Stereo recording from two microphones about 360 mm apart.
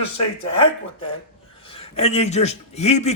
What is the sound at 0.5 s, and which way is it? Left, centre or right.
A man's voice, centre.